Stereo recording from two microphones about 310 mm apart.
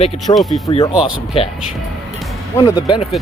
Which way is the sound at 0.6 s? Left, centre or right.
Centre.